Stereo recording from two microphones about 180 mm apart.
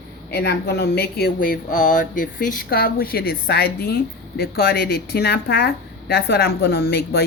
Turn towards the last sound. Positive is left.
turn(degrees=60)  # may be behind; listen again after turning